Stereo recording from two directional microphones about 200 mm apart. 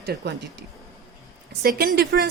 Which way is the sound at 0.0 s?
55° right (ahead or behind).